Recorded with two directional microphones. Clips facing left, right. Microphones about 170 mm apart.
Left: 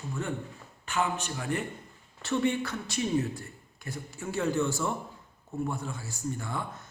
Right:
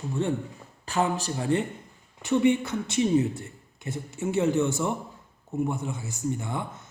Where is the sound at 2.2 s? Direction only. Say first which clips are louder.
Right 6 dB; 20° right (ahead or behind).